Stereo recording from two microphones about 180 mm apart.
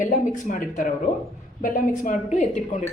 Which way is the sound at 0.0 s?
45° left (ahead or behind).